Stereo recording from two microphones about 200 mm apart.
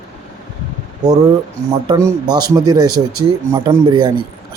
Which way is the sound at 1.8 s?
20° right (ahead or behind).